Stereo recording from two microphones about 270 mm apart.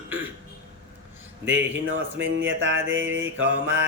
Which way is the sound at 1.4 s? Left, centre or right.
Right.